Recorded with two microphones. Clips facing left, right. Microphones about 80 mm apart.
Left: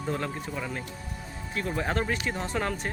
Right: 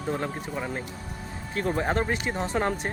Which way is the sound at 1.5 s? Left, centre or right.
Right.